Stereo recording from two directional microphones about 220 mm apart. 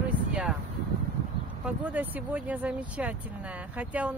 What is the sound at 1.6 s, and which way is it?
Speech, 5° right (ahead or behind).